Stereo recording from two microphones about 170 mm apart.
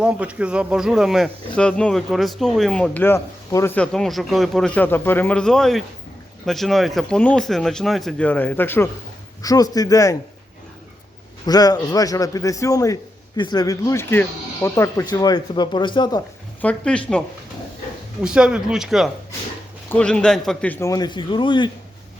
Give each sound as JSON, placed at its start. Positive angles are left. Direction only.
{"t": 0.0, "sound": "speech", "side_deg": -5}
{"t": 3.9, "sound": "a man's voice", "side_deg": 0}
{"t": 11.4, "sound": "a man's voice", "side_deg": 20}
{"t": 16.6, "sound": "a man's voice", "side_deg": 5}
{"t": 18.2, "sound": "a man's voice", "side_deg": -5}